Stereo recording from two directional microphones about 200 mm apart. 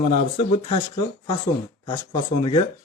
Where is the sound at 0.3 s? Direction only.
30° left (ahead or behind).